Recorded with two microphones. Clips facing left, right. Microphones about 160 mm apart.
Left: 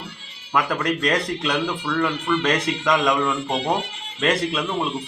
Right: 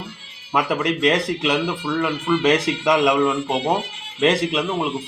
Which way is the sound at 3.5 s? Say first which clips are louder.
Right 2 dB; 25° right (ahead or behind).